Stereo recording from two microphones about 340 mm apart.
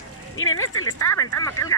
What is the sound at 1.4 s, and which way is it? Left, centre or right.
Speech, centre.